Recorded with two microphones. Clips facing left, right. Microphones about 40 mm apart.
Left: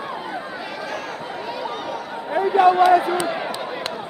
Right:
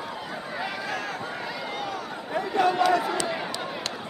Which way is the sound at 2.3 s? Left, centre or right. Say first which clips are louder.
Left 8 dB; centre.